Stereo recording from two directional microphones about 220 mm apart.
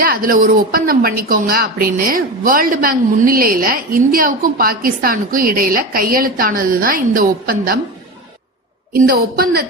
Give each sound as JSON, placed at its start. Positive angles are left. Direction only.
{"t": 0.0, "sound": "speech", "side_deg": -40}
{"t": 8.9, "sound": "a woman's voice", "side_deg": -40}